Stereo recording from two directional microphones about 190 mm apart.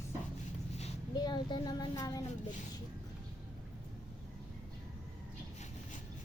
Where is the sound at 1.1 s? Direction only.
20° left (ahead or behind).